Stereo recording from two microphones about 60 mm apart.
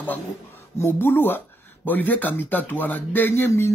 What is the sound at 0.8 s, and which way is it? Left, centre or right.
Speech, left.